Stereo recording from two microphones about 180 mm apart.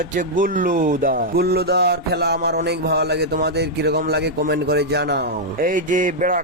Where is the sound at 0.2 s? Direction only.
50° right (ahead or behind).